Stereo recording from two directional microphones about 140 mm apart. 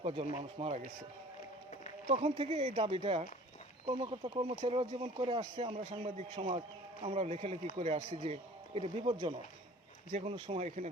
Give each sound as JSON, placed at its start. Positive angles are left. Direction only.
{"t": 0.0, "sound": "speech", "side_deg": -40}
{"t": 2.0, "sound": "a man's voice", "side_deg": -50}
{"t": 6.0, "sound": "a man's voice", "side_deg": -55}
{"t": 6.3, "sound": "a man's voice", "side_deg": -40}